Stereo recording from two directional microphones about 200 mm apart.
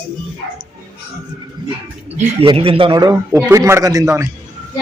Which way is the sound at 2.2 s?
30° right (ahead or behind).